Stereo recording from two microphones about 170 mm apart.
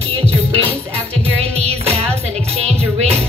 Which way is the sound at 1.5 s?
35° right (ahead or behind).